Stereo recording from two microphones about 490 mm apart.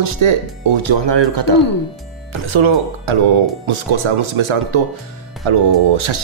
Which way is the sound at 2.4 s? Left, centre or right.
Right.